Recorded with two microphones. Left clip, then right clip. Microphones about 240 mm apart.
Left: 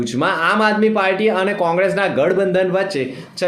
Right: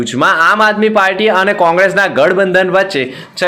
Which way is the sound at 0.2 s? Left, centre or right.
Centre.